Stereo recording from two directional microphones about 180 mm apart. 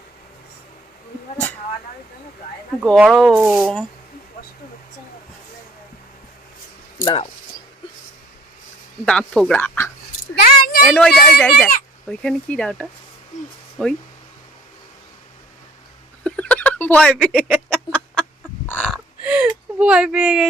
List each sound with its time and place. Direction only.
2.8 s speech: centre (ahead or behind)
7.0 s speech: 30° left (ahead or behind)
9.0 s speech: 5° left (ahead or behind)
10.3 s a sound: 60° left (ahead or behind)
10.8 s speech: 5° left (ahead or behind)
16.2 s a sound: 5° left (ahead or behind)
17.7 s chicken: 5° left (ahead or behind)
18.9 s speech: 5° right (ahead or behind)